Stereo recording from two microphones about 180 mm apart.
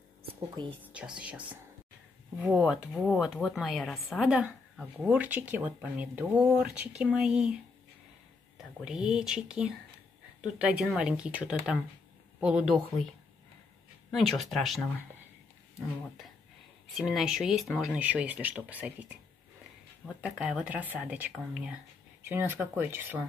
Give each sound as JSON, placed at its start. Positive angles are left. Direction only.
{"t": 0.6, "sound": "speech", "side_deg": -25}
{"t": 0.9, "sound": "a woman's voice", "side_deg": -5}
{"t": 14.1, "sound": "a woman's voice", "side_deg": 0}
{"t": 16.9, "sound": "a woman's voice", "side_deg": 0}
{"t": 20.2, "sound": "speech", "side_deg": -5}